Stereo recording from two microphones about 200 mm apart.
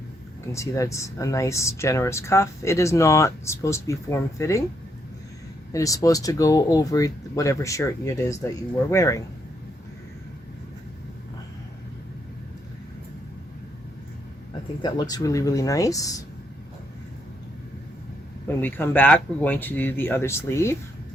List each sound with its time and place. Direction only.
0.5 s speech: 15° left (ahead or behind)
5.7 s speech: 15° left (ahead or behind)
14.8 s speech: 20° left (ahead or behind)
18.4 s speech: 10° left (ahead or behind)